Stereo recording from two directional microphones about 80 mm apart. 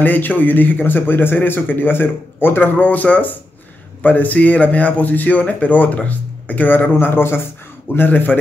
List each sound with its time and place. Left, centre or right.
0.0 s a man's voice: left